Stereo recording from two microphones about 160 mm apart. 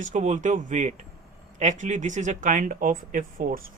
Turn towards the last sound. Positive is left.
turn(degrees=-55)  # may be behind; listen again after turning